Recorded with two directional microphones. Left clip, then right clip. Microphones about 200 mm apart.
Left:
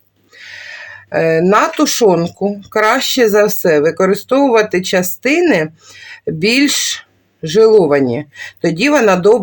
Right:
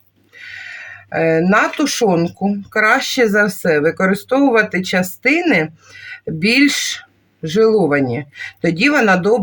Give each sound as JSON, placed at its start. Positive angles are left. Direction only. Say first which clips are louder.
{"t": 0.3, "sound": "speech", "louder": "left 1 dB", "side_deg": 35}